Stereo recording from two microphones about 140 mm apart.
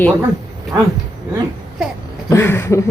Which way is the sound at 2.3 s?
15° left (ahead or behind).